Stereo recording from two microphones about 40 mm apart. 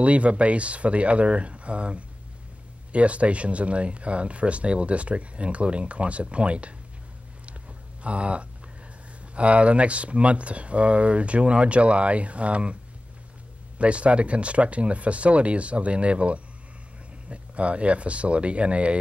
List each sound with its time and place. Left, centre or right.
0.0 s speech: right
8.0 s speech: right
13.7 s speech: right